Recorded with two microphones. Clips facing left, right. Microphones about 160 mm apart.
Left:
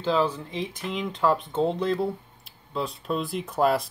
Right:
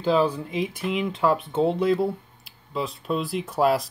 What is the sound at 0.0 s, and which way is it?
Speech, 10° right (ahead or behind).